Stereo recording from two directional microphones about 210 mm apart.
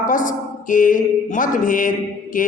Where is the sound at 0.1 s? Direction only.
40° left (ahead or behind).